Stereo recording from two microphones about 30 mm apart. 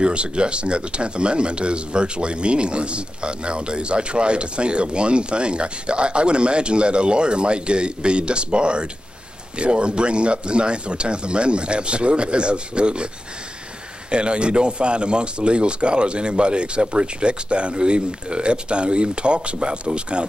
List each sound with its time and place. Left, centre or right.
0.0 s speech: right
14.1 s speech: right